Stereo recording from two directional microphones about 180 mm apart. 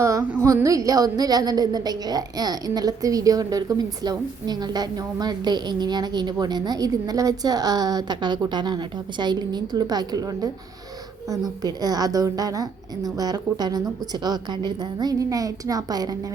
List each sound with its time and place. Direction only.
0.0 s a woman's voice: 15° right (ahead or behind)